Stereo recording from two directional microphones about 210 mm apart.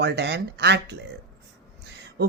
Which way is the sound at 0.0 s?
55° right (ahead or behind).